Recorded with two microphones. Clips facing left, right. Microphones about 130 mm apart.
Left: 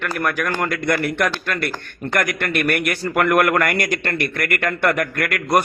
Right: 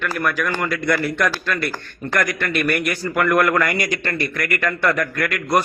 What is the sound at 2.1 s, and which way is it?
A man's voice, 60° left (ahead or behind).